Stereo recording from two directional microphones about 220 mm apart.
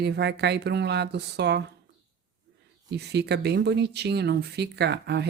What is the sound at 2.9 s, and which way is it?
Speech, 50° right (ahead or behind).